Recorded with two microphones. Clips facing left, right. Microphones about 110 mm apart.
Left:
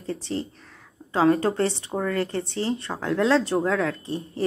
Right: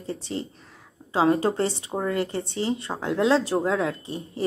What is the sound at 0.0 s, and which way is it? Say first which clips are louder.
A woman's voice: left 2 dB; 25° right (ahead or behind).